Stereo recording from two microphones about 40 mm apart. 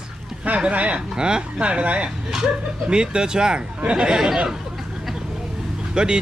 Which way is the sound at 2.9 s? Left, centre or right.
Right.